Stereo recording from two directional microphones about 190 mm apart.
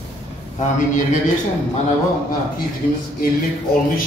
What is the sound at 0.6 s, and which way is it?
Speech, 40° left (ahead or behind).